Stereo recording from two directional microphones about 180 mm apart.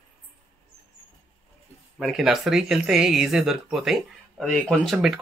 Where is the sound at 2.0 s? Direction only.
Centre (ahead or behind).